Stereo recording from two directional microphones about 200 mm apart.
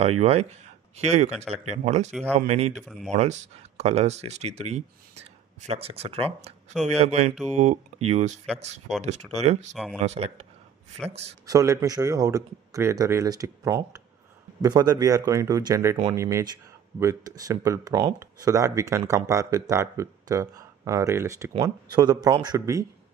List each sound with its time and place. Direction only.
0.2 s speech: 30° right (ahead or behind)
2.7 s speech: centre (ahead or behind)
3.1 s speech: 35° right (ahead or behind)
11.4 s speech: 15° right (ahead or behind)